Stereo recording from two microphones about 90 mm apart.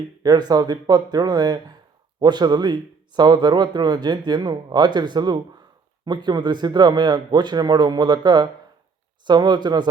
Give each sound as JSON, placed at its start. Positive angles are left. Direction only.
{"t": 0.2, "sound": "speech", "side_deg": -50}